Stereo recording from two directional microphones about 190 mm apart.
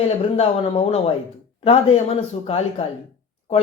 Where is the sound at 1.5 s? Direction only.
30° left (ahead or behind).